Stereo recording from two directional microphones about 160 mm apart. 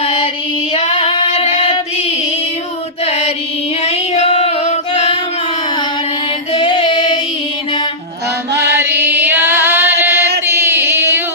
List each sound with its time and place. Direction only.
0.0 s child singing: 35° left (ahead or behind)
0.7 s female singing: 35° left (ahead or behind)
3.0 s music: 40° left (ahead or behind)
3.8 s child singing: 40° left (ahead or behind)
6.5 s music: 30° left (ahead or behind)
8.5 s mantra: 90° right
8.9 s a sound: 90° right
9.2 s female singing: 10° right (ahead or behind)
10.4 s singing: 15° right (ahead or behind)